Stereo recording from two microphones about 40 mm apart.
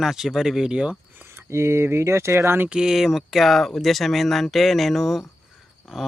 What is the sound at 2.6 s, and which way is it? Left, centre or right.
Speech, right.